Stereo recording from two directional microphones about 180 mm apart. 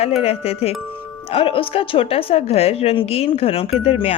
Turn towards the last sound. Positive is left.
turn(degrees=35)  # may be behind; listen again after turning